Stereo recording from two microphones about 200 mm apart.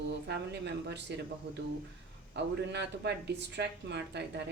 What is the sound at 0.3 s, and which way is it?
Speech, 55° right (ahead or behind).